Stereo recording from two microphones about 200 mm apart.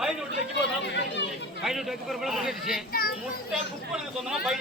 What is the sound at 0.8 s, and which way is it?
Chatter, 60° left (ahead or behind).